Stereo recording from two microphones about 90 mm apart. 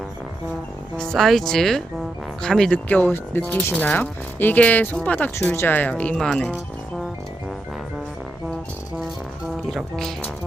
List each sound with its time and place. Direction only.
0.9 s speech: 5° left (ahead or behind)
6.1 s speech: 5° left (ahead or behind)
9.6 s speech: 5° left (ahead or behind)